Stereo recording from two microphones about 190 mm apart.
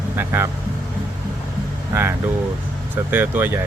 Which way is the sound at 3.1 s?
10° right (ahead or behind).